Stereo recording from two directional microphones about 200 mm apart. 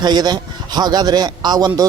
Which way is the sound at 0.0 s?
20° right (ahead or behind).